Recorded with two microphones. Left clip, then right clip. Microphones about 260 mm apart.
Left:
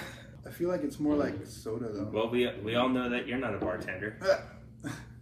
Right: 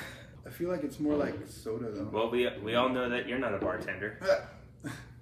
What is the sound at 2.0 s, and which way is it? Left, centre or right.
A man's voice, centre.